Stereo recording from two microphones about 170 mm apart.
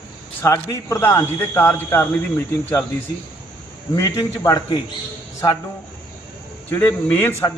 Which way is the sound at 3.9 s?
20° left (ahead or behind).